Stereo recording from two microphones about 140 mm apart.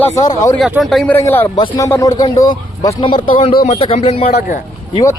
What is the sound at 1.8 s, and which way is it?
A man's voice, 25° left (ahead or behind).